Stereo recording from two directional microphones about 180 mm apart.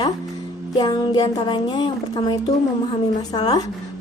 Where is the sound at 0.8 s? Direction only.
25° left (ahead or behind).